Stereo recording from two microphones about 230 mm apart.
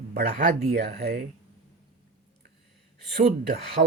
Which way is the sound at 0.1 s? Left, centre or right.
Right.